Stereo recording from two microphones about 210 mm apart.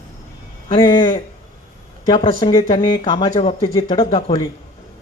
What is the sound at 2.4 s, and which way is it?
Speech, 25° left (ahead or behind).